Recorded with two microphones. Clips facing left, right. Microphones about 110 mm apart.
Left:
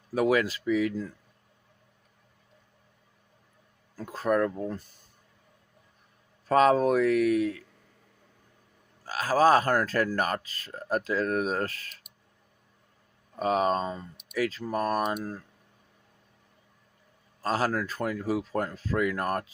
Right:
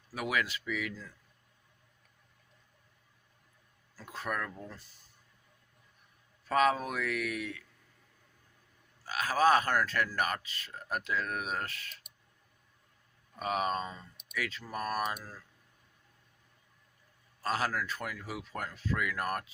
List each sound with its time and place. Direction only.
0.1 s speech: 35° left (ahead or behind)
4.1 s speech: 35° left (ahead or behind)
4.5 s speech: 50° left (ahead or behind)
6.5 s speech: 35° left (ahead or behind)
9.0 s speech: 35° left (ahead or behind)
13.4 s speech: 35° left (ahead or behind)
15.1 s speech: 50° left (ahead or behind)
17.4 s speech: 35° left (ahead or behind)